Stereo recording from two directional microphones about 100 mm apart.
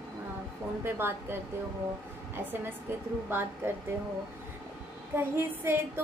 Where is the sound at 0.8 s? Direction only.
25° right (ahead or behind).